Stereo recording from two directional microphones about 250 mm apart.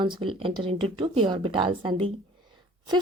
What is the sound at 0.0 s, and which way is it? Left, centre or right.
A woman's voice, centre.